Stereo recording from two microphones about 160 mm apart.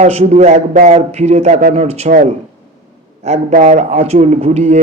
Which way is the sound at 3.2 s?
50° right (ahead or behind).